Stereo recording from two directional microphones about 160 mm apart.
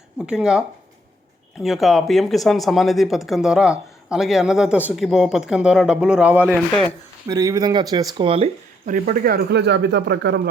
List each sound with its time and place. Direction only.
0.2 s speech: 5° right (ahead or behind)
7.3 s speech: 20° right (ahead or behind)
8.9 s speech: 60° right (ahead or behind); by 10.5 s 90° right